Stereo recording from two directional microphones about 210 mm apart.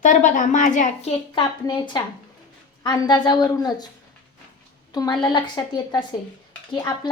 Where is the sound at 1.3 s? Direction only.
20° left (ahead or behind).